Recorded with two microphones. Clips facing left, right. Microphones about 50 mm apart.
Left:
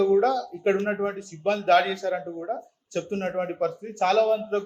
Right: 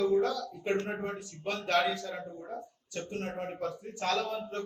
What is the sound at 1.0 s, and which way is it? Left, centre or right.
A man's voice, left.